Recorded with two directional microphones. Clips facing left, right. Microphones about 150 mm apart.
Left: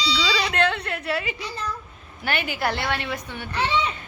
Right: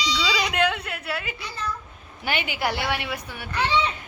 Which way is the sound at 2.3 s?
15° right (ahead or behind).